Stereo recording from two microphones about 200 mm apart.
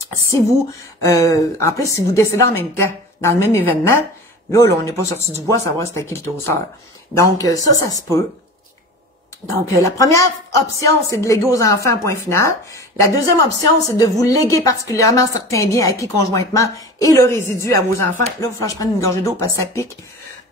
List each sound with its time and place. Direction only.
1.0 s a woman's voice: 15° left (ahead or behind)
7.2 s a woman's voice: 15° left (ahead or behind)
9.8 s a woman's voice: 15° left (ahead or behind)